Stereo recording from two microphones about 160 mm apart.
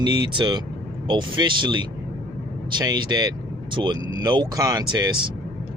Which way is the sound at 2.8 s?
25° right (ahead or behind).